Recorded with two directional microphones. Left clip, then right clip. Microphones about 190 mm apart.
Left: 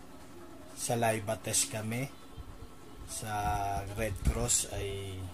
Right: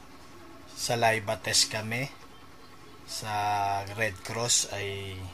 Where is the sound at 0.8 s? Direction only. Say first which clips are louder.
Right 5 dB; 10° left (ahead or behind).